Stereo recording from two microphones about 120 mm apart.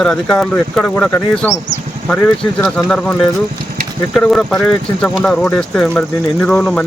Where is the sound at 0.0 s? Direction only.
5° left (ahead or behind).